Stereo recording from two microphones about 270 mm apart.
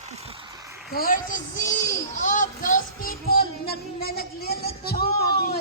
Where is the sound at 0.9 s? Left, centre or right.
Left.